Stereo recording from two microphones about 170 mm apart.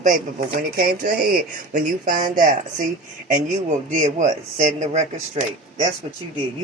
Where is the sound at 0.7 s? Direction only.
55° right (ahead or behind).